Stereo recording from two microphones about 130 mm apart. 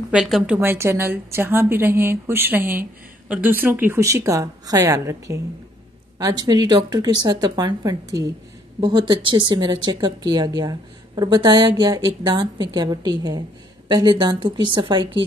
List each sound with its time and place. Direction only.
0.1 s a woman's voice: 5° right (ahead or behind)
0.6 s a woman's voice: 20° right (ahead or behind); by 15.2 s 40° right (ahead or behind)